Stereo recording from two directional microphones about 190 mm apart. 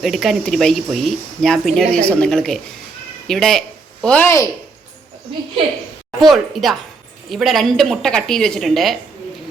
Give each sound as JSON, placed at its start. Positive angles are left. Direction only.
{"t": 0.0, "sound": "speech", "side_deg": 0}
{"t": 6.1, "sound": "speech", "side_deg": 0}